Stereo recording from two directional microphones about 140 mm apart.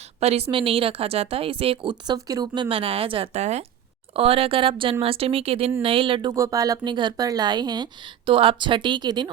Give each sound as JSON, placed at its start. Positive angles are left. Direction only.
{"t": 0.2, "sound": "speech", "side_deg": -50}
{"t": 6.3, "sound": "speech", "side_deg": -25}